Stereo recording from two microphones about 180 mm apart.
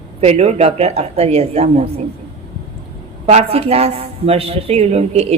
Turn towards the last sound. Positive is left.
turn(degrees=-35)  # may be behind; listen again after turning